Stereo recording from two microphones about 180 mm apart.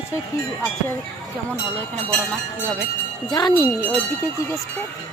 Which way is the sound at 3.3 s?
25° left (ahead or behind).